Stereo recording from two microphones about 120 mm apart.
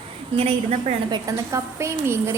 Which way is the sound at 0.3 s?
55° right (ahead or behind).